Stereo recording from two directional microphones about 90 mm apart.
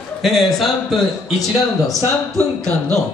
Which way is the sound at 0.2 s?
Centre (ahead or behind).